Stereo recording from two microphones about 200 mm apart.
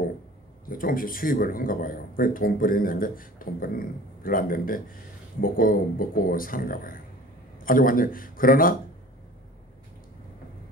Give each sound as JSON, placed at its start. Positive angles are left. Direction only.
{"t": 0.7, "sound": "speech", "side_deg": 45}